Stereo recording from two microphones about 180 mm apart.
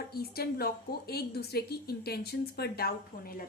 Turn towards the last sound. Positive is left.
turn(degrees=55)  # may be behind; listen again after turning